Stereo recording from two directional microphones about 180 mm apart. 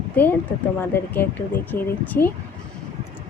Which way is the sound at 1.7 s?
10° left (ahead or behind).